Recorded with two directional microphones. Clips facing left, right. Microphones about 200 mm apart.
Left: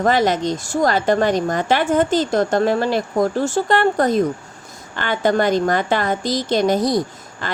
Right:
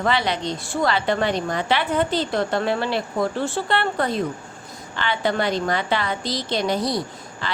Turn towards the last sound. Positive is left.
turn(degrees=45)  # may be behind; listen again after turning